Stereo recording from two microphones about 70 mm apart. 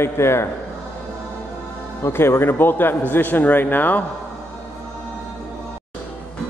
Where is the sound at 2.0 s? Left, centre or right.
Left.